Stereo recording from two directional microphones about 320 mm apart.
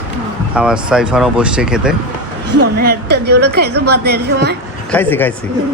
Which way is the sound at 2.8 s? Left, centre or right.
Right.